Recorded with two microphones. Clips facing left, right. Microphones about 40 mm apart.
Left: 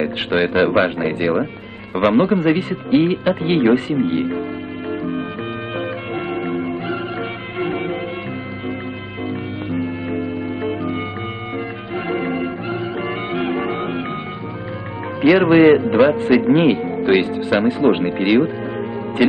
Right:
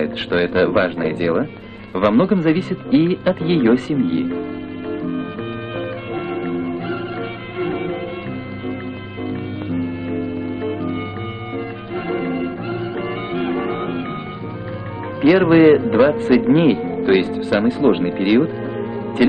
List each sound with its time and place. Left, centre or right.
0.0 s speech: centre
5.8 s music: left
9.7 s music: left
15.2 s speech: centre